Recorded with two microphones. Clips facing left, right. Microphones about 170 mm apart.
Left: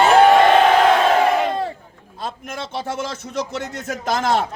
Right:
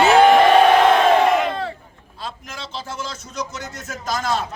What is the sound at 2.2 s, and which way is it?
A man's voice, 55° left (ahead or behind).